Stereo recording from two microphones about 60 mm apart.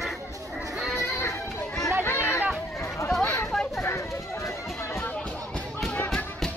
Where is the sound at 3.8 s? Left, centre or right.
Left.